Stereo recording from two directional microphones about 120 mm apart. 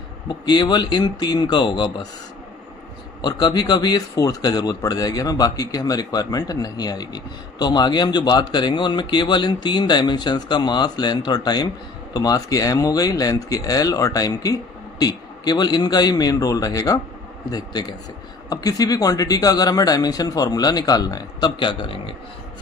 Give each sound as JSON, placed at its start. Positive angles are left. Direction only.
{"t": 0.3, "sound": "speech", "side_deg": 40}
{"t": 3.2, "sound": "speech", "side_deg": 35}